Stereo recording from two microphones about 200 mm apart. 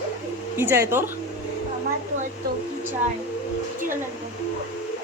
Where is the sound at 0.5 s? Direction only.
10° right (ahead or behind).